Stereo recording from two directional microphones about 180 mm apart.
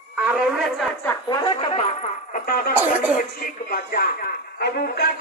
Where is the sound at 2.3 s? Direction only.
55° left (ahead or behind).